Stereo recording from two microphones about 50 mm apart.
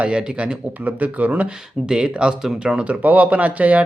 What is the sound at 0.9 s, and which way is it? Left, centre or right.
Speech, right.